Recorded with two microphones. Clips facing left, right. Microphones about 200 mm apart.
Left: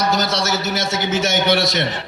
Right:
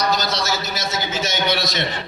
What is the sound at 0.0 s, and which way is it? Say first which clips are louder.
Speech: left 2 dB; 25° left (ahead or behind).